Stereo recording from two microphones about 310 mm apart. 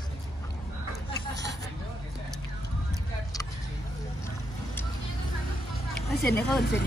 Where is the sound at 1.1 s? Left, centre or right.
Right.